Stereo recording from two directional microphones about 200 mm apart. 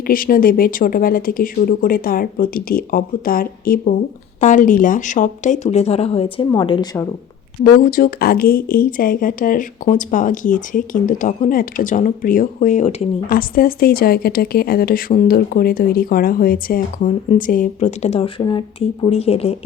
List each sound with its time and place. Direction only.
0.1 s speech: 45° left (ahead or behind); by 7.0 s 25° left (ahead or behind)
7.6 s speech: 45° left (ahead or behind)
13.6 s speech: 45° left (ahead or behind); by 19.5 s 30° left (ahead or behind)